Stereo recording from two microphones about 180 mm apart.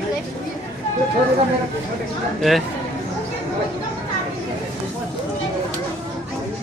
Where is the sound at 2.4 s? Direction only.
Centre (ahead or behind).